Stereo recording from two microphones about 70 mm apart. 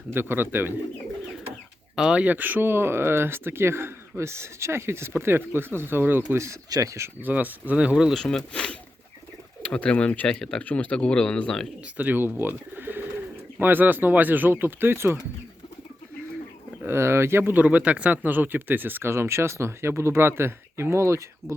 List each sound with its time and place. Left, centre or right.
0.1 s speech: right
2.0 s speech: centre
2.2 s speech: right
6.3 s speech: right
6.7 s speech: right
7.2 s speech: right
8.1 s speech: centre
10.2 s speech: centre
10.6 s speech: left
11.9 s speech: right
16.8 s speech: right
17.6 s speech: right